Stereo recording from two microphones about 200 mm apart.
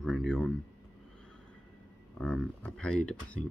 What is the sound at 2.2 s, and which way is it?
Speech, 5° left (ahead or behind).